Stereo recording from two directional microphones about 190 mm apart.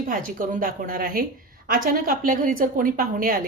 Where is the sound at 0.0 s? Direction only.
45° right (ahead or behind).